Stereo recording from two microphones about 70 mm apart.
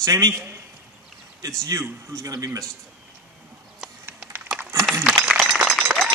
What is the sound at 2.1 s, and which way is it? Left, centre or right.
Speech, right.